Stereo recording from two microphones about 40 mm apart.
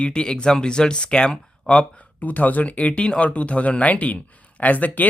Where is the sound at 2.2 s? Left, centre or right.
Left.